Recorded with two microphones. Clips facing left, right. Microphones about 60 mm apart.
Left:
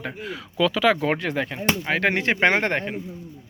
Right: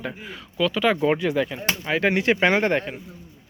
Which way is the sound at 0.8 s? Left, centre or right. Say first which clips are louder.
Even; left.